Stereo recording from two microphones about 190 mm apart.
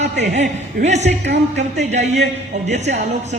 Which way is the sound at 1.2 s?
65° right (ahead or behind).